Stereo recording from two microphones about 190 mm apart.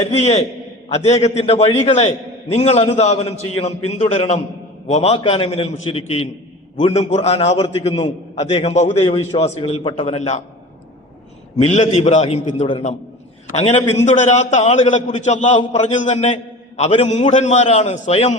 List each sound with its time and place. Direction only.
0.0 s a man's voice: 35° left (ahead or behind)
11.6 s a man's voice: 35° left (ahead or behind)